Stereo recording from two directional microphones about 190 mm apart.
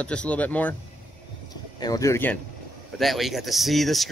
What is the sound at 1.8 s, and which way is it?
Speech, 15° left (ahead or behind).